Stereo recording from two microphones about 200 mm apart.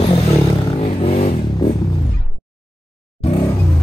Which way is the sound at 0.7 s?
30° left (ahead or behind).